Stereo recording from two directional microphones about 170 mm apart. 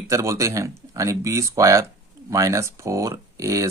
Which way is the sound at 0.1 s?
15° right (ahead or behind).